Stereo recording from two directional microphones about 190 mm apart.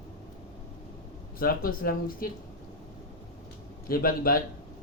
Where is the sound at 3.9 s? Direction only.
50° left (ahead or behind).